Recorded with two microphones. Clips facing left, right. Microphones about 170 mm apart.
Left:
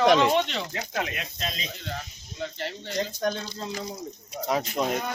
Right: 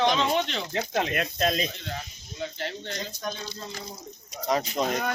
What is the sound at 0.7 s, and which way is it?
Speech, 30° right (ahead or behind).